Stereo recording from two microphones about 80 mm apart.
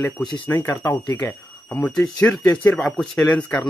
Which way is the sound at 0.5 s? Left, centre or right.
Left.